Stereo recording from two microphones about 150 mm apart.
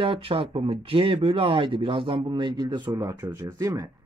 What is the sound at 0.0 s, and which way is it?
Speech, 35° right (ahead or behind).